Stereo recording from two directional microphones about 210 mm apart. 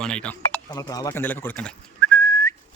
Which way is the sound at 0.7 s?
15° left (ahead or behind).